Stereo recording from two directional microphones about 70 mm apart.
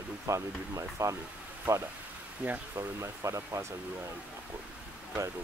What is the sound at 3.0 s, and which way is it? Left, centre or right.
Speech, right.